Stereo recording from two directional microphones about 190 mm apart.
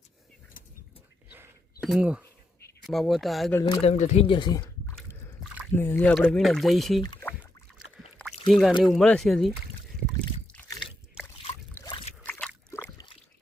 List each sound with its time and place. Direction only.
0.6 s a sound: 45° left (ahead or behind)
1.8 s speech: 5° right (ahead or behind)
3.5 s speech: 20° left (ahead or behind)
3.8 s speech: 35° left (ahead or behind)
4.9 s a sound: 10° left (ahead or behind)
5.7 s speech: 10° left (ahead or behind)
7.2 s rowboat: 10° left (ahead or behind)
8.4 s speech: centre (ahead or behind)
11.2 s trickle: 5° right (ahead or behind)
12.2 s a sound: 10° left (ahead or behind)